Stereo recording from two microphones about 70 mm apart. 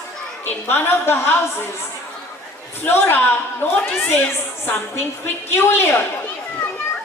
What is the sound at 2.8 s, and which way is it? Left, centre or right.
Speech, left.